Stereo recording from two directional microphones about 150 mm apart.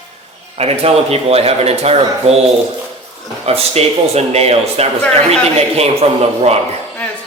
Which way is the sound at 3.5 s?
45° right (ahead or behind).